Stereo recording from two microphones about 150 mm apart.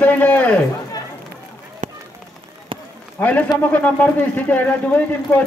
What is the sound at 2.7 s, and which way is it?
Run, 40° right (ahead or behind).